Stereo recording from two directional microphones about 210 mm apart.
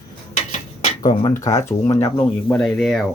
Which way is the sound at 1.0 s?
15° left (ahead or behind).